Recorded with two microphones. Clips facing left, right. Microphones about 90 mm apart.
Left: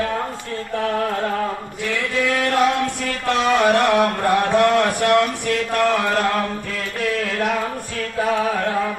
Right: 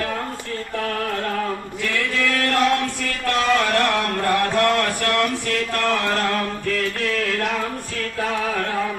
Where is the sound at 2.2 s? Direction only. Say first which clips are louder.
Left 3 dB; 15° left (ahead or behind).